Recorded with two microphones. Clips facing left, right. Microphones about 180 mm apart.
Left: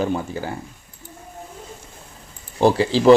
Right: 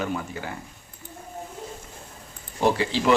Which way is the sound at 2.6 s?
35° left (ahead or behind).